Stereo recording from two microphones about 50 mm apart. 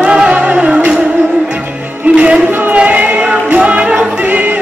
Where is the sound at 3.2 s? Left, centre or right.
Right.